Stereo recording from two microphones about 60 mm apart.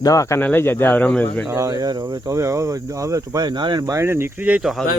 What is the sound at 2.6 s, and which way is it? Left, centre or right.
Speech, right.